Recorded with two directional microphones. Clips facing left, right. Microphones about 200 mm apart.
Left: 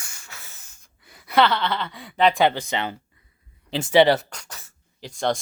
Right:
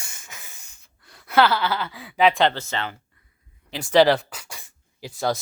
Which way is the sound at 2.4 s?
15° left (ahead or behind).